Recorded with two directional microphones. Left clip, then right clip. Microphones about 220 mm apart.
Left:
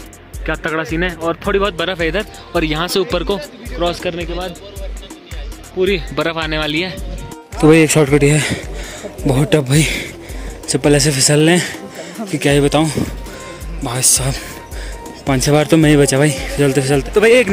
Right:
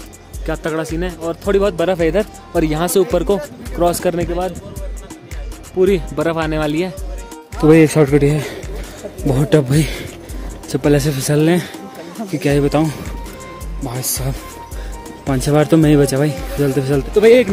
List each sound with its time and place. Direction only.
0.7 s speech: 10° right (ahead or behind)
3.8 s speech: 30° right (ahead or behind)
5.8 s speech: 25° right (ahead or behind)
6.1 s speech: 5° right (ahead or behind)